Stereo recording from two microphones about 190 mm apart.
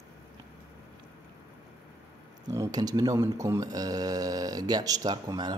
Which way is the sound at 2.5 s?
20° right (ahead or behind).